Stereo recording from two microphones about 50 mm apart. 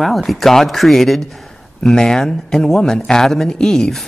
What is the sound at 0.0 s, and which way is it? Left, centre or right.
A man's voice, centre.